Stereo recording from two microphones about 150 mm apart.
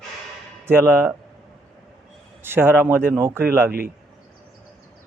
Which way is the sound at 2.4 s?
15° right (ahead or behind).